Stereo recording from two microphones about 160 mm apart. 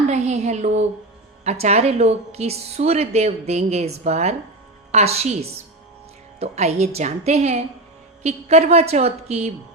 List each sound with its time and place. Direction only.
0.1 s a woman's voice: 45° right (ahead or behind)